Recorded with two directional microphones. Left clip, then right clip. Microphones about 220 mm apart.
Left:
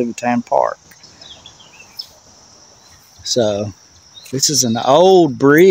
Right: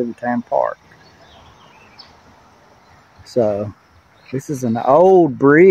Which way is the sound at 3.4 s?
30° left (ahead or behind).